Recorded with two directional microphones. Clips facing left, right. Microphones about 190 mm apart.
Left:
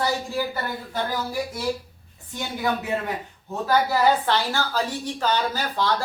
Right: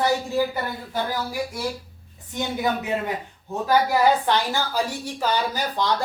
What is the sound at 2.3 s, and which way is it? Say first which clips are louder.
A man's voice: right 2 dB; 20° right (ahead or behind).